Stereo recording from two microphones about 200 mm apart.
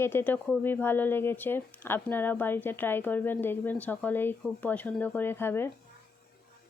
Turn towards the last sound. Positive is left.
turn(degrees=10)  # may be behind; listen again after turning